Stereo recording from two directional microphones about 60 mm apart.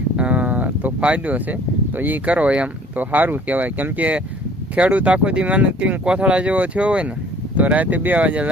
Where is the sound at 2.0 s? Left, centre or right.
Right.